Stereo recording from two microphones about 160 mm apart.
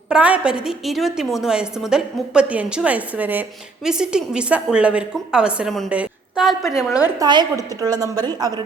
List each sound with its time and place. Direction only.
0.1 s a woman's voice: 10° right (ahead or behind)
7.2 s a woman's voice: 25° right (ahead or behind)